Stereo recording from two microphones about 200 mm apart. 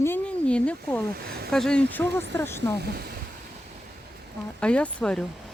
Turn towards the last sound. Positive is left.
turn(degrees=5)  # may be behind; listen again after turning